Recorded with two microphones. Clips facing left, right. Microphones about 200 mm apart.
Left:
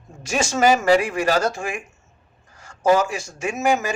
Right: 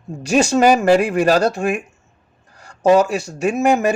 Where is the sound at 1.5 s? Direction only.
60° right (ahead or behind).